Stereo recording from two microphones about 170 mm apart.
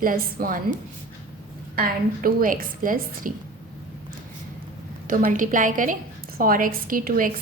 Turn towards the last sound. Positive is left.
turn(degrees=-55)  # may be behind; listen again after turning